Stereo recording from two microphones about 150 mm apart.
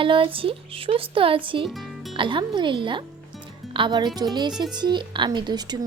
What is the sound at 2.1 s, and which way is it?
Speech, 35° right (ahead or behind).